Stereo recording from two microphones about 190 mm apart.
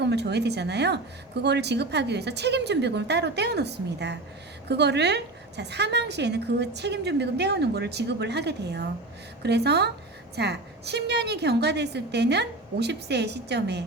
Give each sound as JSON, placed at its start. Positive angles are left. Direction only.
{"t": 0.0, "sound": "a woman's voice", "side_deg": -60}